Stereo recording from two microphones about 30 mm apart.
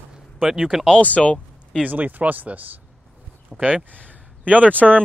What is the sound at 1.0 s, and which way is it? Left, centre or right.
Speech, left.